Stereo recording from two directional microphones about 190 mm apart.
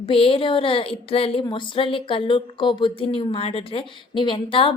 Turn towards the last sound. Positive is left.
turn(degrees=25)  # may be behind; listen again after turning